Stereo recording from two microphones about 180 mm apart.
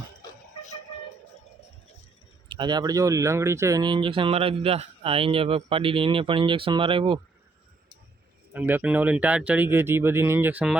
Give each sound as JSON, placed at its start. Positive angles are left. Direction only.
{"t": 2.5, "sound": "speech", "side_deg": -25}
{"t": 8.5, "sound": "speech", "side_deg": -10}